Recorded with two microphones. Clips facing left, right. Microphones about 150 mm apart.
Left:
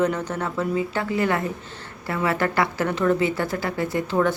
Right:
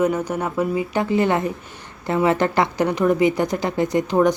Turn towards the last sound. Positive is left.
turn(degrees=-15)  # may be behind; listen again after turning